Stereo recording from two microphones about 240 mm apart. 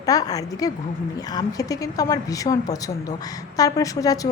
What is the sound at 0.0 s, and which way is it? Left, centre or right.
A woman's voice, centre.